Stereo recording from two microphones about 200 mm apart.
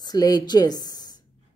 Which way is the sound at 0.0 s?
20° left (ahead or behind).